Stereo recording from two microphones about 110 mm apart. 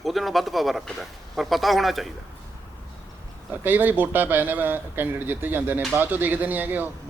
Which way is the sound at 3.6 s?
15° right (ahead or behind).